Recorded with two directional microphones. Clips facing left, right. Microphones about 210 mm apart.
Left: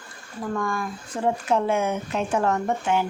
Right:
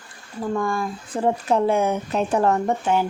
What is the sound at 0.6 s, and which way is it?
Speech, 30° right (ahead or behind).